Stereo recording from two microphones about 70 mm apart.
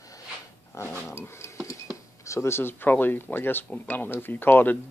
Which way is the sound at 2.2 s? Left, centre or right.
Left.